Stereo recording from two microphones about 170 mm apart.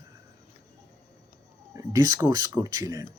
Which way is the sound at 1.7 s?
20° right (ahead or behind).